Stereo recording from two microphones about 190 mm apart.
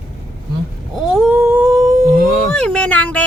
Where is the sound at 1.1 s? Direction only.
5° right (ahead or behind).